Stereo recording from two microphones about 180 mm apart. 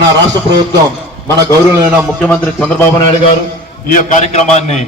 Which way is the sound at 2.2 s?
5° left (ahead or behind).